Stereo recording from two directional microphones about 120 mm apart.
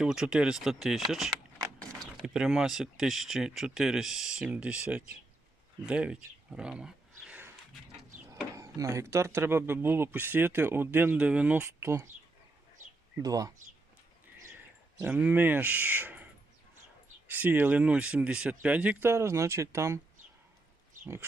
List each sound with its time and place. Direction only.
0.0 s speech: 5° right (ahead or behind)
8.5 s speech: 25° right (ahead or behind); by 11.6 s 10° right (ahead or behind)
11.6 s speech: 20° right (ahead or behind)
13.1 s speech: 30° right (ahead or behind)
15.0 s speech: 15° right (ahead or behind)
17.2 s speech: 15° right (ahead or behind)